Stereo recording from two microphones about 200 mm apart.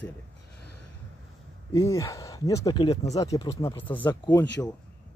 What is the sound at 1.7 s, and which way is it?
Speech, 15° left (ahead or behind).